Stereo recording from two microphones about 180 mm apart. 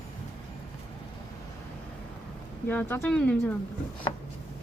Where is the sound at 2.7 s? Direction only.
10° left (ahead or behind).